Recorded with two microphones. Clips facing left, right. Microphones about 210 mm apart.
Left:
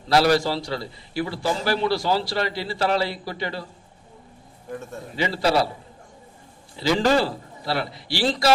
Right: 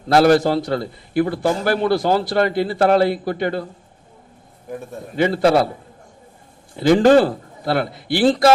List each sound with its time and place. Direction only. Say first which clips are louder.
0.1 s a man's voice: right 6 dB; 50° right (ahead or behind)
5.1 s a man's voice: right 6 dB; 50° right (ahead or behind)
6.7 s a man's voice: right 8 dB; 50° right (ahead or behind)